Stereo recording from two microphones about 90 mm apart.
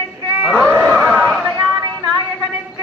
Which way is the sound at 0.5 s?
10° left (ahead or behind).